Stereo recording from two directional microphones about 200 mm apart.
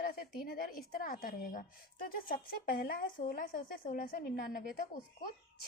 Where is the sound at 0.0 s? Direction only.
45° left (ahead or behind).